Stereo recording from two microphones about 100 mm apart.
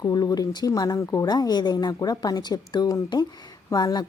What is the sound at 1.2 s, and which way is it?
A woman's voice, 45° left (ahead or behind).